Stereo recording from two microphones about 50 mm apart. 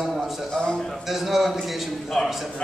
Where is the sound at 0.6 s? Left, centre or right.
Centre.